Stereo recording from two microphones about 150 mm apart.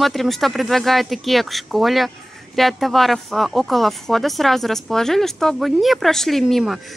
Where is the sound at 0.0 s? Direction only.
Centre (ahead or behind).